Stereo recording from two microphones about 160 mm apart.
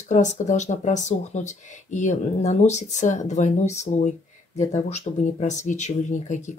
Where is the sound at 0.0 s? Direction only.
50° left (ahead or behind).